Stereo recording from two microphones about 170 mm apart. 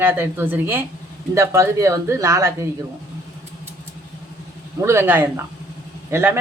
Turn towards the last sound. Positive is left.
turn(degrees=-15)  # may be behind; listen again after turning